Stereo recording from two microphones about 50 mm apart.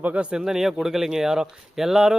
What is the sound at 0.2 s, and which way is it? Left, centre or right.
A man's voice, centre.